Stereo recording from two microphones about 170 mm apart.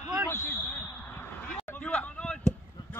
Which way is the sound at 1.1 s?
10° left (ahead or behind).